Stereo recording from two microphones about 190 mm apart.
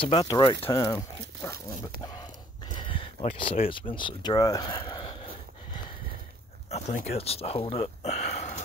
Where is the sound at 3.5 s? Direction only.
30° left (ahead or behind).